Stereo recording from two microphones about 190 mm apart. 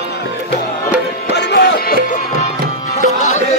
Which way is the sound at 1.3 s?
65° left (ahead or behind).